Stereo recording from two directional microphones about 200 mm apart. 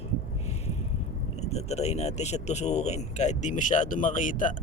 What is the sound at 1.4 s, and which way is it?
Speech, 30° left (ahead or behind).